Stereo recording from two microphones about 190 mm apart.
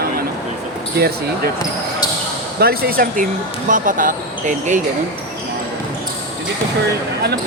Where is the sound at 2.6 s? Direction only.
55° right (ahead or behind).